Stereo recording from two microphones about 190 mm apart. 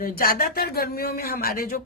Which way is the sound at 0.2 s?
50° left (ahead or behind).